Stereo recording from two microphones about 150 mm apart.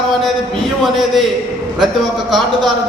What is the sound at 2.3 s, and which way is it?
Speech, centre (ahead or behind).